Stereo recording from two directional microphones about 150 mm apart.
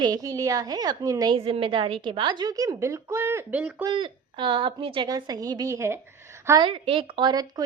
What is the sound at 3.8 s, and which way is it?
A woman's voice, 35° right (ahead or behind).